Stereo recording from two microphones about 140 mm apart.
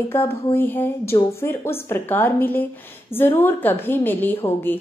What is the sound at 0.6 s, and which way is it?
A woman's voice, 15° left (ahead or behind).